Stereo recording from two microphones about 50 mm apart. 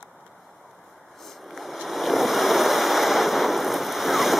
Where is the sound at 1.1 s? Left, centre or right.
Centre.